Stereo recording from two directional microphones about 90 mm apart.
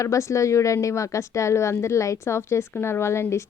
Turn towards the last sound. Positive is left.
turn(degrees=30)  # may be behind; listen again after turning